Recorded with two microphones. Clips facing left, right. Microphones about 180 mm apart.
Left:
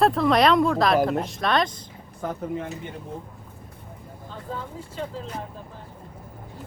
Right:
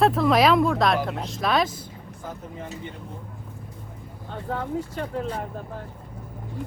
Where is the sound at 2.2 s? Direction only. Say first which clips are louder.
Left 7 dB; 65° left (ahead or behind).